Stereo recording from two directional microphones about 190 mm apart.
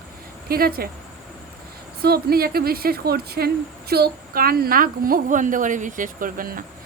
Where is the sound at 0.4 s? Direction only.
50° right (ahead or behind).